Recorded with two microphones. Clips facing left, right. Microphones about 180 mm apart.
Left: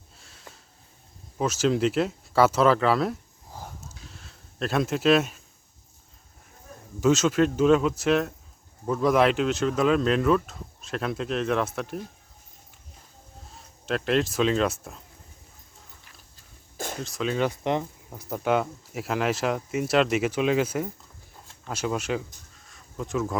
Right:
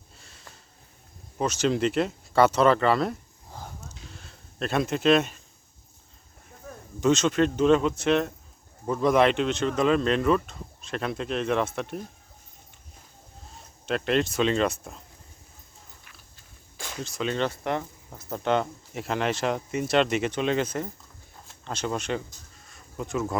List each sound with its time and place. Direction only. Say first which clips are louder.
0.2 s sniff: left 2 dB; centre (ahead or behind)
1.4 s speech: left 1 dB; centre (ahead or behind)
4.1 s a sound: right 2 dB; centre (ahead or behind)
7.0 s speech: left 1 dB; 5° left (ahead or behind)
13.5 s speech: even; centre (ahead or behind)
16.7 s a sound: left 7 dB; 45° left (ahead or behind)
17.0 s speech: left 1 dB; centre (ahead or behind)
17.5 s speech: left 3 dB; 20° left (ahead or behind)
22.7 s a sound: left 1 dB; centre (ahead or behind)